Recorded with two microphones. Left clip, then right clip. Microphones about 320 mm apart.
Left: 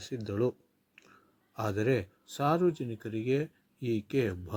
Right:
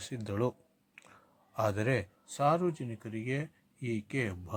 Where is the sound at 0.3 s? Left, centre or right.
Centre.